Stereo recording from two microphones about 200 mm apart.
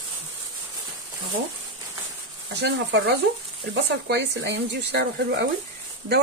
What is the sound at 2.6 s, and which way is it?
Speech, 60° right (ahead or behind).